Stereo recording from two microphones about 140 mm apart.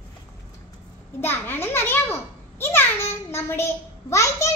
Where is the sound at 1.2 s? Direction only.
15° left (ahead or behind).